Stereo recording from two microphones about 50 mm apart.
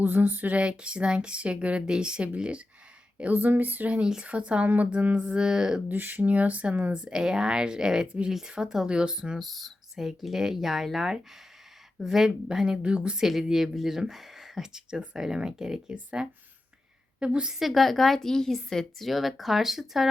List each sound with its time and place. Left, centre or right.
0.0 s a sound: right
0.5 s speech: right
3.3 s a sound: right
4.2 s speech: right
4.6 s a sound: right
5.0 s speech: right
5.9 s speech: right; by 9.4 s centre
9.4 s speech: centre
13.2 s speech: centre
17.5 s speech: centre